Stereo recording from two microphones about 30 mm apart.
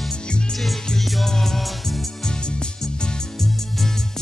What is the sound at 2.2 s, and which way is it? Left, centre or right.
Music, left.